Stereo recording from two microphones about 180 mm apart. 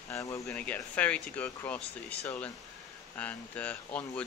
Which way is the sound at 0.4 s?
5° left (ahead or behind).